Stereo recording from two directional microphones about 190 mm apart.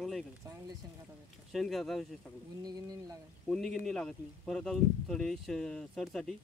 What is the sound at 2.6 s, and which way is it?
Speech, 20° right (ahead or behind).